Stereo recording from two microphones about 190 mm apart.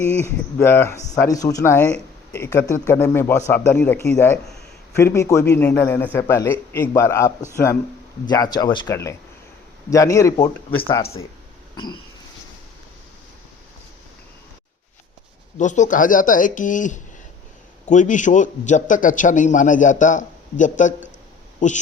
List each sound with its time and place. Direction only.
0.0 s speech: 10° left (ahead or behind)
9.9 s speech: 15° left (ahead or behind)
15.5 s a man's voice: 40° left (ahead or behind)